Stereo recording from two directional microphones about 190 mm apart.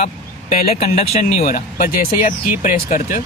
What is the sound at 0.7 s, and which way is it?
Speech, 35° left (ahead or behind).